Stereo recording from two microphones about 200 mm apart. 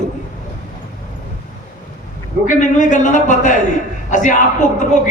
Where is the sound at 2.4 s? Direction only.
40° left (ahead or behind).